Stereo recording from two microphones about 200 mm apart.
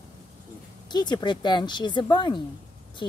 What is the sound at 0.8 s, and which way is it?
Speech, 20° left (ahead or behind).